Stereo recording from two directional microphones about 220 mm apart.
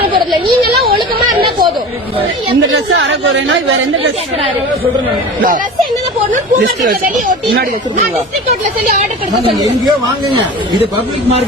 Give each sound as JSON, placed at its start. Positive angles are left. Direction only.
{"t": 0.6, "sound": "a sound", "side_deg": -45}
{"t": 2.6, "sound": "chatter", "side_deg": -60}
{"t": 6.3, "sound": "speech", "side_deg": -35}